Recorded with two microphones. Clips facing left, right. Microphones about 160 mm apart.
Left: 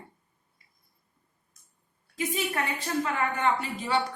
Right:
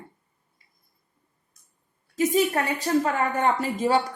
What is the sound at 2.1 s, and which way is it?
A woman's voice, 40° right (ahead or behind).